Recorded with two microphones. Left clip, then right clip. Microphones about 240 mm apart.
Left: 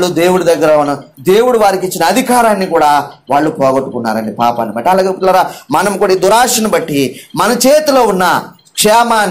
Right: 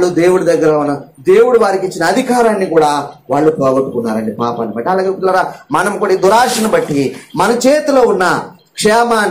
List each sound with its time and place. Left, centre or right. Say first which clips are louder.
0.0 s a man's voice: even; left